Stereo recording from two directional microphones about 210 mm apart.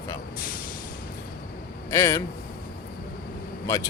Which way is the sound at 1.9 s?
15° left (ahead or behind).